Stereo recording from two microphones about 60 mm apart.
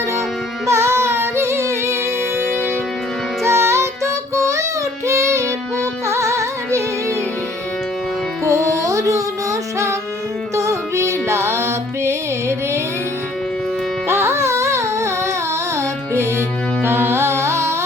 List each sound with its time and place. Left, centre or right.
0.7 s music: right
3.4 s music: right
8.4 s music: right
14.1 s music: right